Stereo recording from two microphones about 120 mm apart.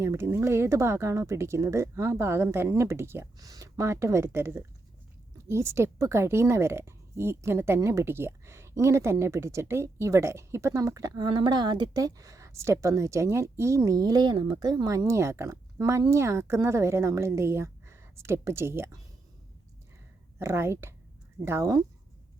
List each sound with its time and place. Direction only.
0.0 s speech: 20° right (ahead or behind)
20.4 s speech: 20° right (ahead or behind)